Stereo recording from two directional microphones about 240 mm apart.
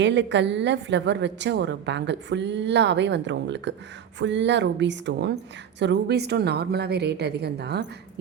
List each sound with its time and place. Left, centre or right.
0.0 s a woman's voice: right